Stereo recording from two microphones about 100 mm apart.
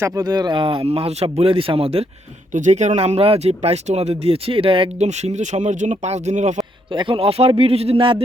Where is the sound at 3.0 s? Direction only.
85° right.